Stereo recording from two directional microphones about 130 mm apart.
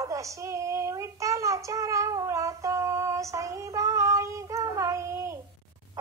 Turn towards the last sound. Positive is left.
turn(degrees=-20)  # may be behind; listen again after turning